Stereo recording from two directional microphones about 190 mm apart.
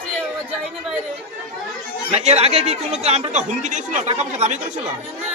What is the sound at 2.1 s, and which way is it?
Speech, 35° right (ahead or behind).